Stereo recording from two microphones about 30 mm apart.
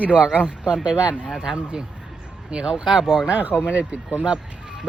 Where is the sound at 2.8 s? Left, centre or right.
Centre.